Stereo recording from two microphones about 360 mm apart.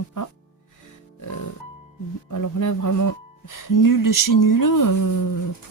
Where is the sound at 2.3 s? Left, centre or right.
Left.